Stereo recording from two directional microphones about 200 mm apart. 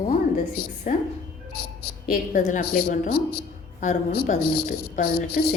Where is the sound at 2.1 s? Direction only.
40° left (ahead or behind).